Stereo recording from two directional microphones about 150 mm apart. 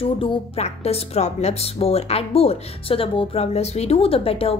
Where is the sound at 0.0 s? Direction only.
35° left (ahead or behind).